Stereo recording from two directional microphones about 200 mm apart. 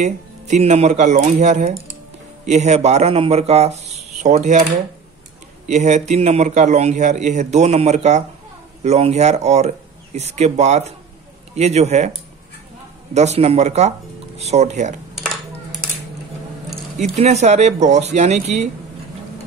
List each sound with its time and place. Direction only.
0.0 s a man's voice: 35° right (ahead or behind)
5.7 s a man's voice: 35° right (ahead or behind)
17.1 s a man's voice: 35° right (ahead or behind)